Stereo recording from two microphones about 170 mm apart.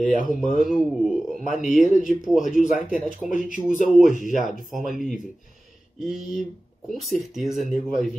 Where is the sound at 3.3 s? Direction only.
50° left (ahead or behind).